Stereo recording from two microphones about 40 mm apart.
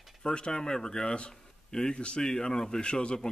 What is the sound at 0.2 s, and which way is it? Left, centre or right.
Speech, left.